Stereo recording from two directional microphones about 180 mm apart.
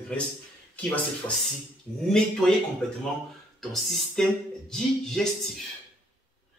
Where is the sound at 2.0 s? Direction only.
5° left (ahead or behind).